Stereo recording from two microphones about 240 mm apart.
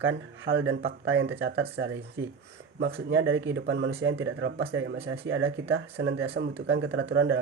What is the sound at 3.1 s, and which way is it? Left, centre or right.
Speech, right.